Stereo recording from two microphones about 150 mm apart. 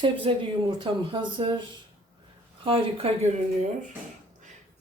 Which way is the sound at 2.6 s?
40° right (ahead or behind).